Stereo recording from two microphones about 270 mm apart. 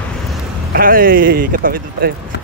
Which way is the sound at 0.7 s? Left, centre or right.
Right.